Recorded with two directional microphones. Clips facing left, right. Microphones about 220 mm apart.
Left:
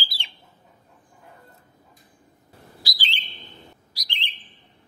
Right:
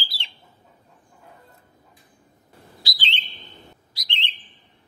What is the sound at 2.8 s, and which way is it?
Bird, 25° right (ahead or behind).